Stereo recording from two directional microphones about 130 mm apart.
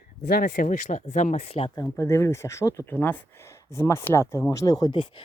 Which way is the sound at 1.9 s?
20° left (ahead or behind).